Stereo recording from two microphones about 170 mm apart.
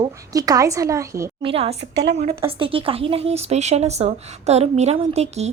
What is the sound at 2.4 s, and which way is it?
Speech, 30° right (ahead or behind).